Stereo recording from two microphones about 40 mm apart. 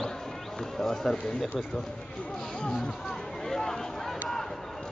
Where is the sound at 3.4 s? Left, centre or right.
Centre.